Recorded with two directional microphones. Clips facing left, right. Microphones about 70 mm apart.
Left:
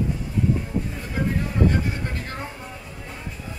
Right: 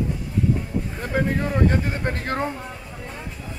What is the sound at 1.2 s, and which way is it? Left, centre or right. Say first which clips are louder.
Speech: right 2 dB; right.